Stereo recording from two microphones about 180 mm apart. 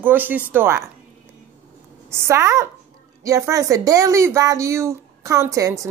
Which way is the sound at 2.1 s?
15° right (ahead or behind).